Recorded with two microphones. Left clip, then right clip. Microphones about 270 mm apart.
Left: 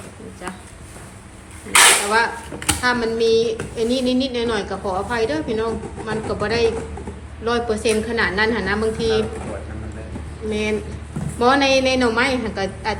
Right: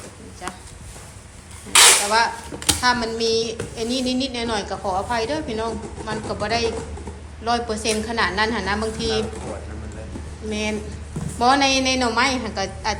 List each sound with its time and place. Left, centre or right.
2.0 s speech: centre
10.5 s speech: centre